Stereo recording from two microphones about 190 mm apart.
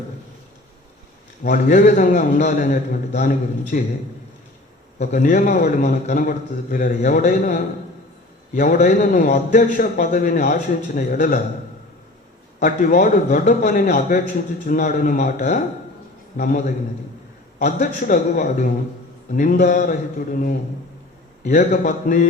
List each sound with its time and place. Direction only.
1.5 s a man's voice: 45° left (ahead or behind)
4.9 s a man's voice: 45° left (ahead or behind)
12.5 s a man's voice: 45° left (ahead or behind)